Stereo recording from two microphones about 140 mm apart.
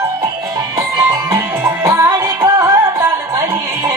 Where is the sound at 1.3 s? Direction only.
20° right (ahead or behind).